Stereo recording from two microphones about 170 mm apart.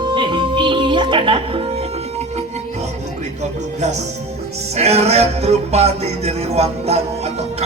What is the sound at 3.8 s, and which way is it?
Music, 40° right (ahead or behind).